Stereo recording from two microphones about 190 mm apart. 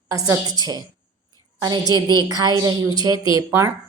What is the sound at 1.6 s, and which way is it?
A woman's voice, 20° right (ahead or behind).